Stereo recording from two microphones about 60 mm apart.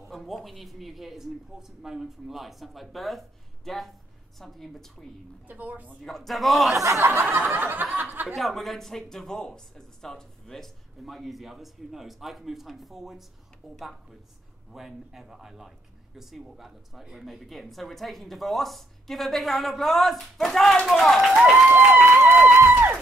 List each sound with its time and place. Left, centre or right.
0.1 s speech: centre
5.5 s snicker: right
6.0 s speech: centre
6.7 s speech: right
7.2 s snicker: right
8.3 s speech: centre
21.4 s speech: centre
21.6 s a sound: right
22.7 s music: right